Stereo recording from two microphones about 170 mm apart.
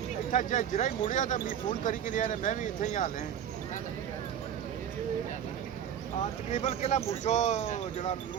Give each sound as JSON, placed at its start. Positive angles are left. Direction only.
{"t": 0.3, "sound": "speech", "side_deg": 45}
{"t": 6.5, "sound": "speech", "side_deg": 40}